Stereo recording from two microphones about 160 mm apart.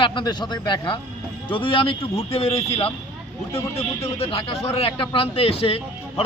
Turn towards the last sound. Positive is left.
turn(degrees=35)  # may be behind; listen again after turning